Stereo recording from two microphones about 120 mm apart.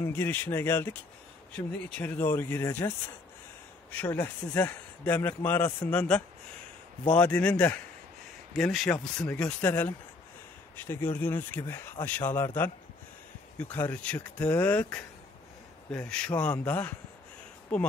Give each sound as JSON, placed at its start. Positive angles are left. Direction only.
{"t": 0.0, "sound": "speech", "side_deg": 20}
{"t": 2.0, "sound": "speech", "side_deg": 15}
{"t": 3.9, "sound": "speech", "side_deg": 15}
{"t": 13.6, "sound": "speech", "side_deg": 15}